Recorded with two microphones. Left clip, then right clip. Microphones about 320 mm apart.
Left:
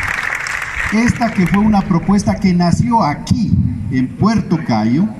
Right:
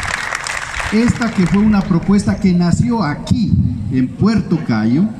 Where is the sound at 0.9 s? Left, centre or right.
Centre.